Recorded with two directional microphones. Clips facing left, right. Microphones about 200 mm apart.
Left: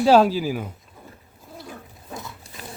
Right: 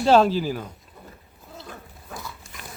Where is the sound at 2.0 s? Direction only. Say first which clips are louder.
Left 2 dB; 20° left (ahead or behind).